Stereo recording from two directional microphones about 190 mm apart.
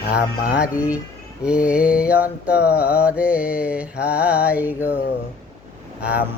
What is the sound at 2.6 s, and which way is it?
Mantra, 55° left (ahead or behind).